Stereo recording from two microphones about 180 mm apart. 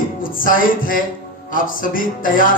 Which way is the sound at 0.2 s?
50° left (ahead or behind).